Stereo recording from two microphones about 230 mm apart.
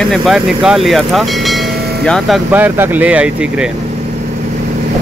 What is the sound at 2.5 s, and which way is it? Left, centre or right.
Speech, centre.